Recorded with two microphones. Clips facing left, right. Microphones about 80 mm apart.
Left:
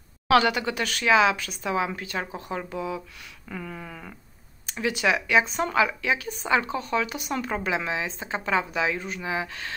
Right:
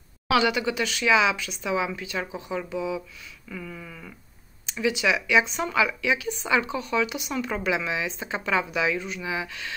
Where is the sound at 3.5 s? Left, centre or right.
Left.